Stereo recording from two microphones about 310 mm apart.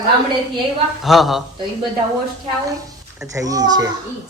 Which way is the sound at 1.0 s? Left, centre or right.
Centre.